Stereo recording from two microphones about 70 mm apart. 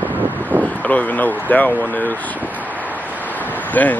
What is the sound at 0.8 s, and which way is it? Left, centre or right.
Speech, left.